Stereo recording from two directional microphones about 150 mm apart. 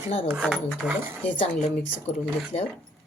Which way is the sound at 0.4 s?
Centre (ahead or behind).